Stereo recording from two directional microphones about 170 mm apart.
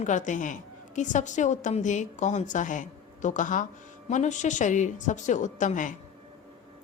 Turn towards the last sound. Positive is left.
turn(degrees=50)  # may be behind; listen again after turning